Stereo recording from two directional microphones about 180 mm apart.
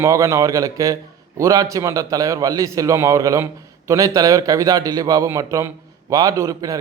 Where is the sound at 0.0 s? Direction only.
15° right (ahead or behind).